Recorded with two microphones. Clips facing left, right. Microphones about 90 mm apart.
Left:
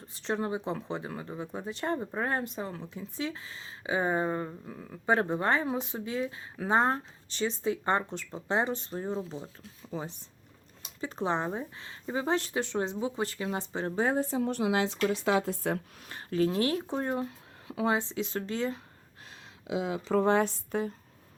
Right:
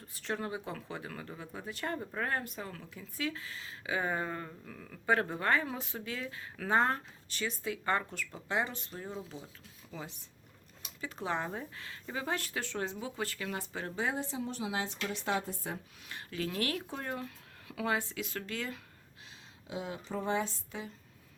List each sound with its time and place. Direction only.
0.1 s speech: 20° left (ahead or behind); by 14.5 s 45° left (ahead or behind)
14.5 s speech: 70° left (ahead or behind)
15.0 s speech: 90° left
16.0 s speech: 35° left (ahead or behind)
19.6 s speech: 90° left; by 20.9 s 55° left (ahead or behind)